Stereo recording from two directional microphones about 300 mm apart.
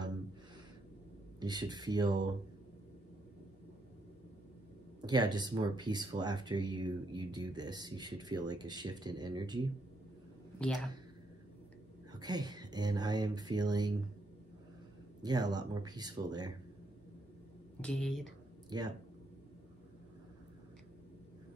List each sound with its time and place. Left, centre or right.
1.4 s speech: centre
5.0 s speech: centre
10.6 s speech: centre
12.1 s speech: centre
15.2 s speech: centre
17.8 s speech: centre
18.7 s speech: centre